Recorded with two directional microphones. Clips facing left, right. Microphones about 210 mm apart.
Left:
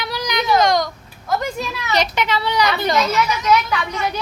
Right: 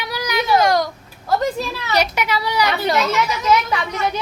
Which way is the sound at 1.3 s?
30° right (ahead or behind).